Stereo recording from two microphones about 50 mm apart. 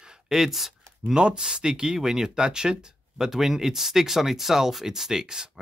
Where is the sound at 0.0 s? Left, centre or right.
Centre.